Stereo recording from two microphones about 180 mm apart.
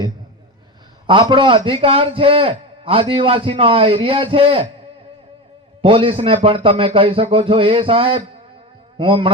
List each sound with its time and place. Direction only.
1.0 s a man's voice: 25° right (ahead or behind)
5.8 s a man's voice: 30° right (ahead or behind)